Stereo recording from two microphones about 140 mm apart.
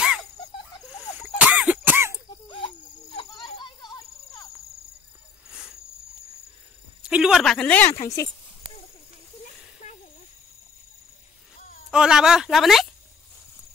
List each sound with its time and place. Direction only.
0.0 s a sound: 5° right (ahead or behind)
1.4 s cough: 10° right (ahead or behind)
2.4 s cricket: 35° left (ahead or behind)
3.4 s snake: 30° left (ahead or behind)
5.5 s cricket: 5° right (ahead or behind)
7.0 s a sound: 5° right (ahead or behind); by 7.9 s 10° left (ahead or behind)
7.9 s speech: 20° left (ahead or behind)
11.9 s speech: 5° right (ahead or behind)